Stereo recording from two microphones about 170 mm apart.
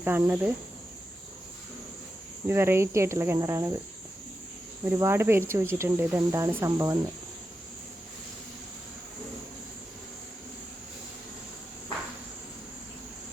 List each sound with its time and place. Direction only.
0.0 s speech: 10° right (ahead or behind)
2.5 s speech: 15° right (ahead or behind)
4.9 s speech: 15° right (ahead or behind)